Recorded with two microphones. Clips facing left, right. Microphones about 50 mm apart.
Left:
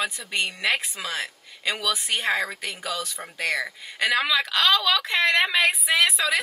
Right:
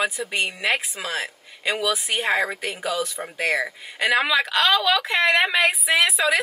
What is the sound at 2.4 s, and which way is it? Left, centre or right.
Speech, centre.